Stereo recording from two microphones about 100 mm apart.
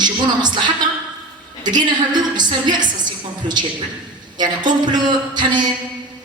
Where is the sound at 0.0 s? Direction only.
45° right (ahead or behind).